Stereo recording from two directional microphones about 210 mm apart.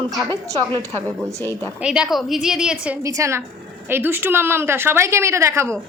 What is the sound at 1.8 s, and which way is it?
A woman's voice, 5° right (ahead or behind).